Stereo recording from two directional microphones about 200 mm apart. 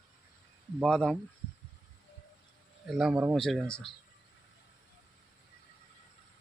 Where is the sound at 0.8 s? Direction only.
5° left (ahead or behind).